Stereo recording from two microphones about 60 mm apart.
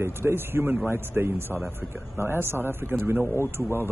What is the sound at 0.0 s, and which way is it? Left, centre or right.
A man's voice, right.